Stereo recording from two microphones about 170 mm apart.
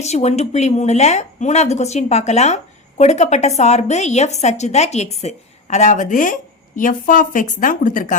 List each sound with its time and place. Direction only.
0.0 s a woman's voice: 40° left (ahead or behind)